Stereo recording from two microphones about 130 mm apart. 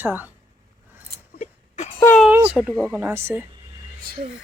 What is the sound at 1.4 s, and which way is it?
Whimper, 60° left (ahead or behind).